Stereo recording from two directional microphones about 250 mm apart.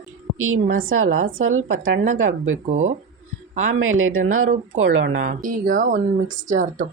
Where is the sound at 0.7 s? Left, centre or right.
Right.